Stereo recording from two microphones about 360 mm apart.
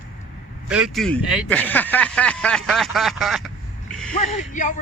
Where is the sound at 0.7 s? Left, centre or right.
Centre.